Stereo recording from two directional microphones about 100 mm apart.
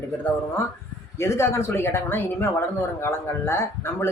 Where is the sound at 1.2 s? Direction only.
25° left (ahead or behind).